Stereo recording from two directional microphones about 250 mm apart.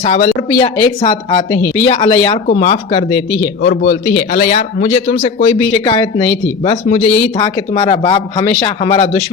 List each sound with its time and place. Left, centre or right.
0.0 s speech: left
3.4 s speech: left; by 9.0 s centre